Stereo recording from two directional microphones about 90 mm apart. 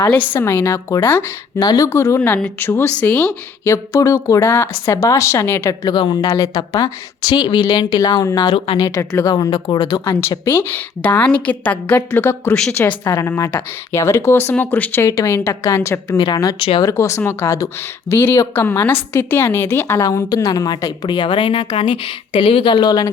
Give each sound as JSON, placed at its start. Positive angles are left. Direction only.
{"t": 0.3, "sound": "a woman's voice", "side_deg": 25}
{"t": 1.5, "sound": "a woman's voice", "side_deg": 45}
{"t": 1.9, "sound": "a woman's voice", "side_deg": 30}
{"t": 3.6, "sound": "speech", "side_deg": 35}
{"t": 5.9, "sound": "a woman's voice", "side_deg": 55}
{"t": 8.5, "sound": "speech", "side_deg": 90}
{"t": 9.5, "sound": "a woman's voice", "side_deg": 65}
{"t": 10.0, "sound": "a woman's voice", "side_deg": 30}
{"t": 15.1, "sound": "speech", "side_deg": 35}
{"t": 16.1, "sound": "a woman's voice", "side_deg": 50}
{"t": 16.8, "sound": "a woman's voice", "side_deg": 35}
{"t": 20.1, "sound": "a woman's voice", "side_deg": 45}